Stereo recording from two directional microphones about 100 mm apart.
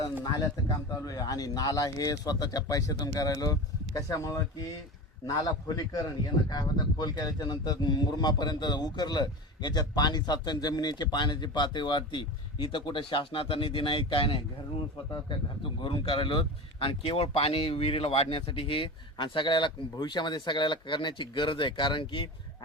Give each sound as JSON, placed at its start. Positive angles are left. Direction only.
{"t": 0.3, "sound": "speech", "side_deg": 40}